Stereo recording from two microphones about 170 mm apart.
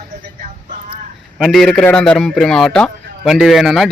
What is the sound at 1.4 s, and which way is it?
A man's voice, centre (ahead or behind).